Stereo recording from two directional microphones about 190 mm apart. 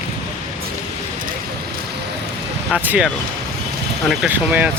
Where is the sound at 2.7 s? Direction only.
5° right (ahead or behind).